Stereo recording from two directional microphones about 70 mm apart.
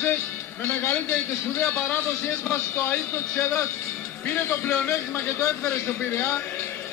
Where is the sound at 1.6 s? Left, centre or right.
Left.